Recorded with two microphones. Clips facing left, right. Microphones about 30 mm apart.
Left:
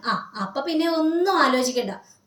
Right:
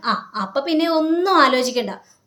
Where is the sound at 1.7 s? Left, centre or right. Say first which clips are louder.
Right 3 dB; right.